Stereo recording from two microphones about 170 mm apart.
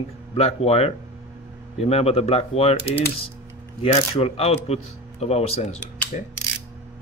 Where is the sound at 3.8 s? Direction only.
35° left (ahead or behind).